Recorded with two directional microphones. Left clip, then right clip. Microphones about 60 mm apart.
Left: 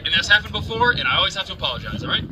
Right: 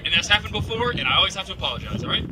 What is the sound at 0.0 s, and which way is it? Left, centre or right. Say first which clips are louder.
A man's voice: left 3 dB; left.